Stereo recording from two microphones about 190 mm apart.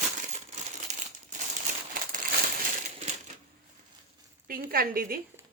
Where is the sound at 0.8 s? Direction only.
40° right (ahead or behind).